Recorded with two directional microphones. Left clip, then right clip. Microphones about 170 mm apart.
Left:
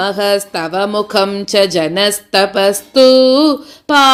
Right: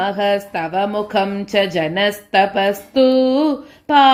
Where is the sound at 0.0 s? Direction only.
35° left (ahead or behind).